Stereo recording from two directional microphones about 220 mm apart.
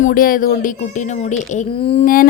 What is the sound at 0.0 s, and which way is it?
A woman's voice, 40° left (ahead or behind).